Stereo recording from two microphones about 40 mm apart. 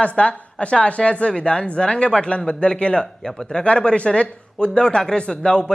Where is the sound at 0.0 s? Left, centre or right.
Left.